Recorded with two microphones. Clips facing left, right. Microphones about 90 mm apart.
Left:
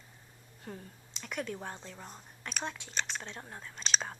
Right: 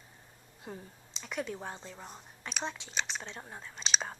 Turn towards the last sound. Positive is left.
turn(degrees=0)  # may be behind; listen again after turning